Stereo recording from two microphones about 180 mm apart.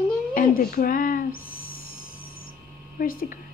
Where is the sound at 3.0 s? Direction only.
45° left (ahead or behind).